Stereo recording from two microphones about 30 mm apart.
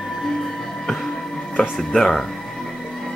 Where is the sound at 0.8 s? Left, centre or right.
Centre.